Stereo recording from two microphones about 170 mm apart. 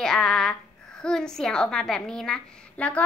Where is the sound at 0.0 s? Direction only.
5° left (ahead or behind).